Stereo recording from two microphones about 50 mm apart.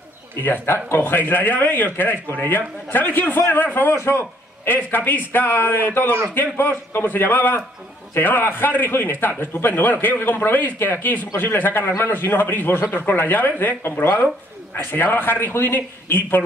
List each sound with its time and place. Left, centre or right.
0.4 s speech: left
3.9 s speech: left